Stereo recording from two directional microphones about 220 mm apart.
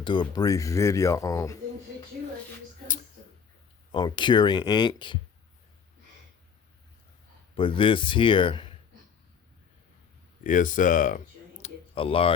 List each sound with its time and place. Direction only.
0.0 s speech: 20° left (ahead or behind)
3.9 s speech: 20° left (ahead or behind)
7.5 s speech: 25° left (ahead or behind)
10.4 s speech: 35° left (ahead or behind)
11.6 s a sound: 25° left (ahead or behind)